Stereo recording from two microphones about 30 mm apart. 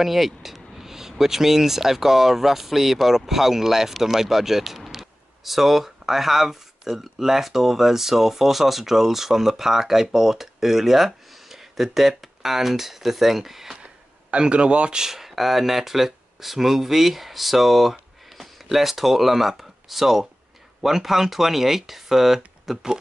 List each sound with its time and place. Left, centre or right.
0.0 s speech: centre
14.3 s speech: right
15.0 s speech: centre